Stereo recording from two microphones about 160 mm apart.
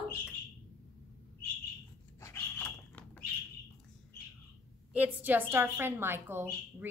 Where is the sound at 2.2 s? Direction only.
15° left (ahead or behind).